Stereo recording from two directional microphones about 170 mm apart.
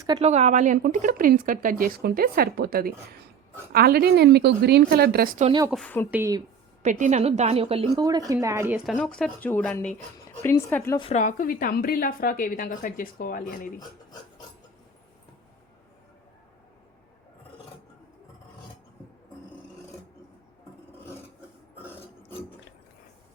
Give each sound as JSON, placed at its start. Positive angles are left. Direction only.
{"t": 0.2, "sound": "a woman's voice", "side_deg": -40}
{"t": 5.7, "sound": "a woman's voice", "side_deg": 10}
{"t": 6.1, "sound": "speech", "side_deg": -10}
{"t": 6.8, "sound": "a woman's voice", "side_deg": -45}
{"t": 8.0, "sound": "speech", "side_deg": -20}
{"t": 8.9, "sound": "a woman's voice", "side_deg": 5}
{"t": 11.1, "sound": "a woman's voice", "side_deg": 50}
{"t": 21.8, "sound": "filing", "side_deg": 10}